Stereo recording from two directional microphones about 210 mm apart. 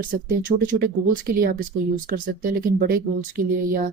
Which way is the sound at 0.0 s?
40° right (ahead or behind).